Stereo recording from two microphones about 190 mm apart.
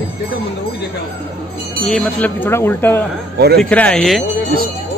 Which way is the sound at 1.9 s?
10° left (ahead or behind).